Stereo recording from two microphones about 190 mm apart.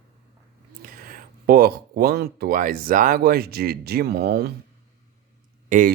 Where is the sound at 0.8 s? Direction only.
50° right (ahead or behind).